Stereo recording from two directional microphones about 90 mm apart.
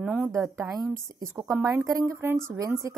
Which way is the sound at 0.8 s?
30° right (ahead or behind).